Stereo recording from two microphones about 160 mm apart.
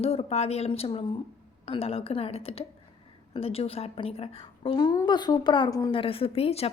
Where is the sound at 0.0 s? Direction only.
40° left (ahead or behind).